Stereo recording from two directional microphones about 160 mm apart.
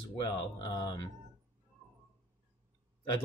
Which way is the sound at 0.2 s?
25° left (ahead or behind).